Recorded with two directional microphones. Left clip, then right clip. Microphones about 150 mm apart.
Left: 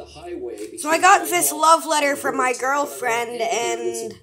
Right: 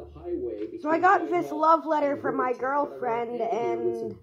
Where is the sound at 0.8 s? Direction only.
20° left (ahead or behind).